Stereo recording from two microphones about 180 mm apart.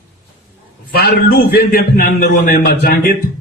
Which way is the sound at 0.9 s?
55° left (ahead or behind).